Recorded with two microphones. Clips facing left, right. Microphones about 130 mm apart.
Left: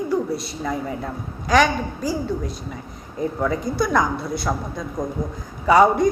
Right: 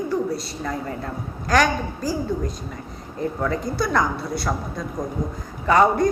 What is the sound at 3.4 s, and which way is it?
A woman's voice, 5° left (ahead or behind).